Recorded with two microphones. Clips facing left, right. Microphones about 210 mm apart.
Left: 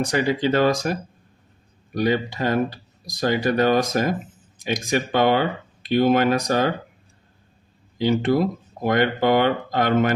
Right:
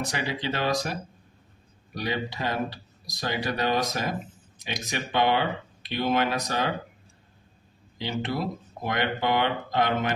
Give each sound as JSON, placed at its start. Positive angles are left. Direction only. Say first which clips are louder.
{"t": 0.0, "sound": "speech", "louder": "left 9 dB", "side_deg": 45}
{"t": 2.0, "sound": "speech", "louder": "left 9 dB", "side_deg": 50}
{"t": 8.0, "sound": "speech", "louder": "left 10 dB", "side_deg": 45}